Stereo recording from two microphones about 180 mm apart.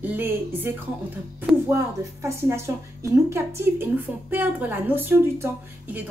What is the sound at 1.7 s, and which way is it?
A woman's voice, 15° right (ahead or behind).